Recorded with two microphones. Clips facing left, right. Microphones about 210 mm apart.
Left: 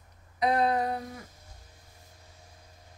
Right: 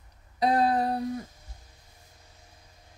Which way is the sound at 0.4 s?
30° right (ahead or behind).